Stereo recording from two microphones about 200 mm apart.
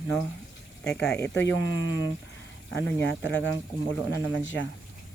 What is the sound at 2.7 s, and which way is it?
Speech, 10° left (ahead or behind).